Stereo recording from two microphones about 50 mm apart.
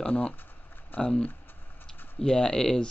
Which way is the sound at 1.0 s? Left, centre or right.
Left.